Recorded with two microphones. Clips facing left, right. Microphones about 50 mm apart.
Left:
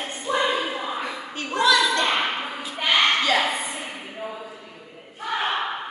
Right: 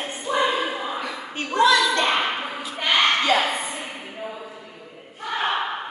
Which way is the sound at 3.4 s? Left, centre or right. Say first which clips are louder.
Even; centre.